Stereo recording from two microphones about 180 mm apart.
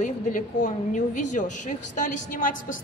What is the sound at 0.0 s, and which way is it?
A woman's voice, 45° left (ahead or behind).